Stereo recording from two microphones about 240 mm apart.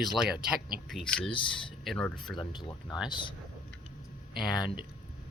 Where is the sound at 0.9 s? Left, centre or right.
Centre.